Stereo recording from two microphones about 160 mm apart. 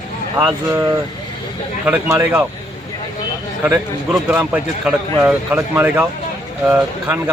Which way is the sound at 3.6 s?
10° right (ahead or behind).